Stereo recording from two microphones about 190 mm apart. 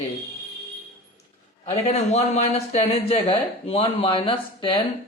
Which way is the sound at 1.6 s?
35° left (ahead or behind).